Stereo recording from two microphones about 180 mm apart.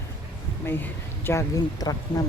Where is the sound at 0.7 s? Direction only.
10° left (ahead or behind).